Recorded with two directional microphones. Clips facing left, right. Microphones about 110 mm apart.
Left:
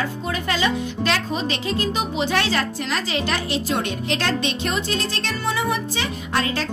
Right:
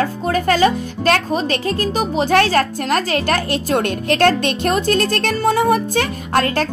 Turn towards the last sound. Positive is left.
turn(degrees=-50)  # may be behind; listen again after turning